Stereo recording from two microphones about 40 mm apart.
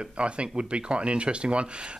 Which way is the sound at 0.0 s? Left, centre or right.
Right.